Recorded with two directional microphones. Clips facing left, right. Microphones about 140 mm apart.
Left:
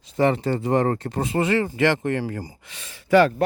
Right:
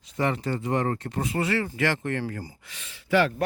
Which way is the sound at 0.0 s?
30° left (ahead or behind).